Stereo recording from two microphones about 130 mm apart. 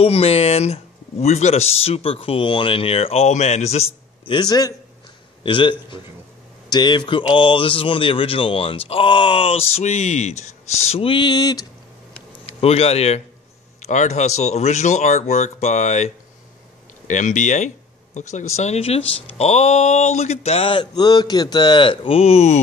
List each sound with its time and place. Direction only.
0.0 s speech: 50° left (ahead or behind)
4.4 s a man's voice: 30° left (ahead or behind)
12.4 s speech: 50° left (ahead or behind)
17.1 s speech: 70° left (ahead or behind)